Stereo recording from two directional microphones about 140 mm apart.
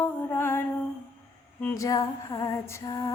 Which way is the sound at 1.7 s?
25° left (ahead or behind).